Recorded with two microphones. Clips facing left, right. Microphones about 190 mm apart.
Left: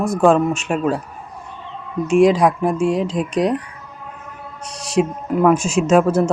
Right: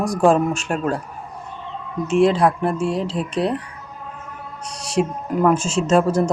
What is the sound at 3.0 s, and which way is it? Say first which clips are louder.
Speech: left 3 dB; 30° right (ahead or behind).